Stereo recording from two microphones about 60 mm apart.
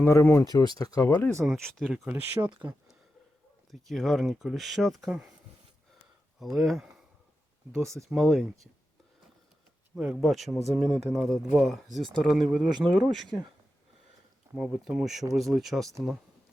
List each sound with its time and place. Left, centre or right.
0.0 s speech: left
0.4 s speech: left
1.0 s speech: left
1.5 s speech: centre
2.0 s speech: right
3.7 s speech: centre
6.4 s speech: centre
8.2 s speech: centre
9.9 s speech: centre
10.2 s speech: centre
14.5 s speech: centre